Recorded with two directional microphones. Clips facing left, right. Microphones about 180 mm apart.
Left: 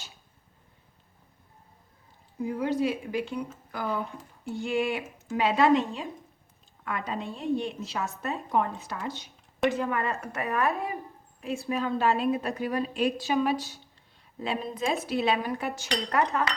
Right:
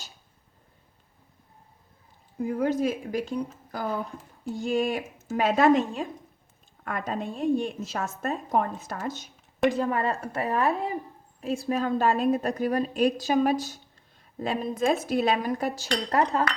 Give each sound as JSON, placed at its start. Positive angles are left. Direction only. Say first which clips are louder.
{"t": 2.4, "sound": "a woman's voice", "louder": "right 2 dB", "side_deg": -50}
{"t": 9.6, "sound": "a woman's voice", "louder": "right 3 dB", "side_deg": -35}